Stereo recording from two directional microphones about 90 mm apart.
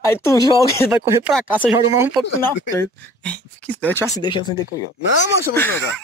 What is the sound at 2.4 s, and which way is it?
Speech, 25° left (ahead or behind).